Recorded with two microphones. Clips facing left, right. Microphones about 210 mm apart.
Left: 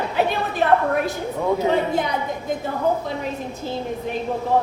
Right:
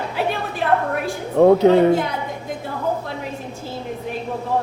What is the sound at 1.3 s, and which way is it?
Speech, 60° right (ahead or behind).